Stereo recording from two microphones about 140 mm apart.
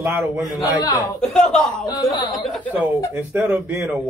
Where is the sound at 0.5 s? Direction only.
25° left (ahead or behind).